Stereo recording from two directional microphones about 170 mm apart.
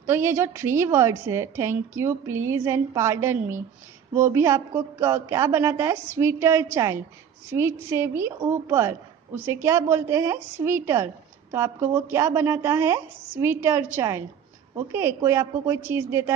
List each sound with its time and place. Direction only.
0.0 s a woman's voice: 15° right (ahead or behind)